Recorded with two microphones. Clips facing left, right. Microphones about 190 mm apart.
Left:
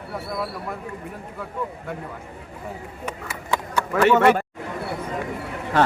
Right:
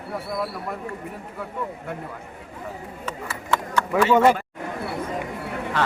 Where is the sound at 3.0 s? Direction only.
15° left (ahead or behind).